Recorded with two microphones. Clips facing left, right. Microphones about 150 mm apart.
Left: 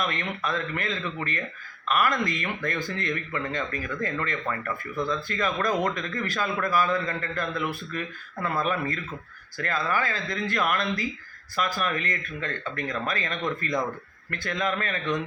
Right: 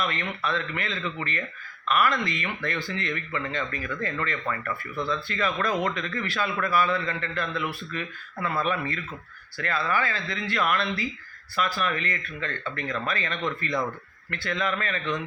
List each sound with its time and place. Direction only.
0.1 s a man's voice: 45° left (ahead or behind)